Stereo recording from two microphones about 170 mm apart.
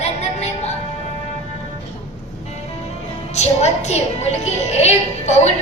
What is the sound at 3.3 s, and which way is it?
Speech, 40° left (ahead or behind).